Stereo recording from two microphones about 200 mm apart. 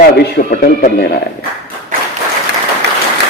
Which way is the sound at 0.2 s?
50° left (ahead or behind).